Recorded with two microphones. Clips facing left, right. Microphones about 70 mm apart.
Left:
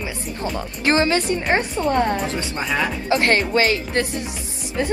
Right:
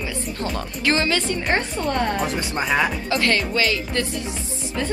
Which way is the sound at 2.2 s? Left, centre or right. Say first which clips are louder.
Right 1 dB; centre.